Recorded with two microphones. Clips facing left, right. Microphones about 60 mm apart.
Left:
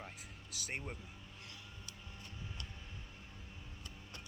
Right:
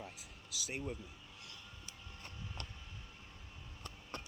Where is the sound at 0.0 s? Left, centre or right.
Left.